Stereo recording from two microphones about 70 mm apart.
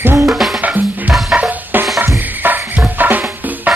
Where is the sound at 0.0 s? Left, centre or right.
Right.